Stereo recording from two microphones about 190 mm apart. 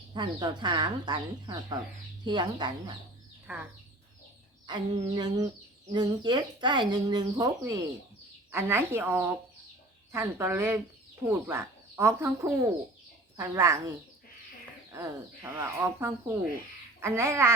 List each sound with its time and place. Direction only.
0.1 s speech: 25° right (ahead or behind)
3.4 s speech: 10° right (ahead or behind)
4.6 s a sound: 25° right (ahead or behind)
4.9 s a sound: 35° right (ahead or behind)
5.2 s speech: 20° right (ahead or behind)
14.9 s speech: 15° right (ahead or behind)